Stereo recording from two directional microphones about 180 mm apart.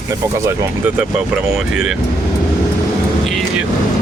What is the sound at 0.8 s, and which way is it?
Speech, 5° right (ahead or behind).